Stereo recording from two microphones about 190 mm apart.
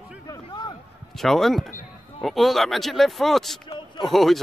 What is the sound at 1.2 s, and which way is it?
Speech, centre (ahead or behind).